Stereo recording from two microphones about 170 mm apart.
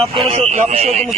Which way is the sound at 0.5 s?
45° right (ahead or behind).